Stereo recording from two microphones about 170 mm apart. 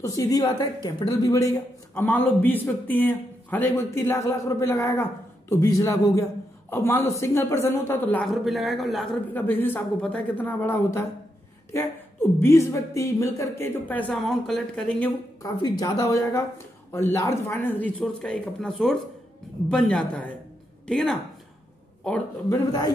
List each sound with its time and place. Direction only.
0.0 s a woman's voice: 20° left (ahead or behind); by 9.1 s centre (ahead or behind)
9.3 s a woman's voice: 10° left (ahead or behind)
15.4 s a woman's voice: 20° left (ahead or behind)